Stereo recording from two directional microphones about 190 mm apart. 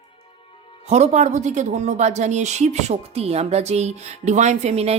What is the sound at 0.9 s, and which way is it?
A woman's voice, 35° right (ahead or behind).